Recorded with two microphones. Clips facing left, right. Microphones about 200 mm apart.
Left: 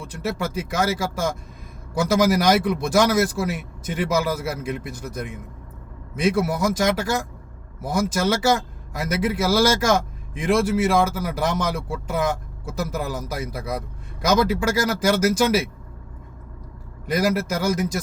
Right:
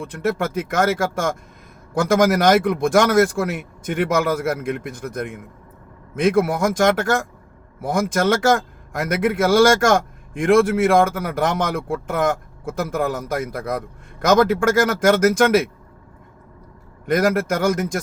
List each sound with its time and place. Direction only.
0.0 s a man's voice: 55° right (ahead or behind)
14.6 s a man's voice: 50° right (ahead or behind)
17.2 s a man's voice: 50° right (ahead or behind)